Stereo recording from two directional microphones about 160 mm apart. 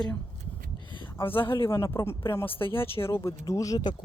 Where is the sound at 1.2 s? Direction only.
15° left (ahead or behind).